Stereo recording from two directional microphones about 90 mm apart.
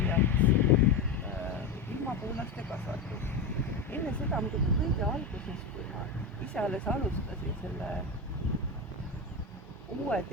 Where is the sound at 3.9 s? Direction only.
20° left (ahead or behind).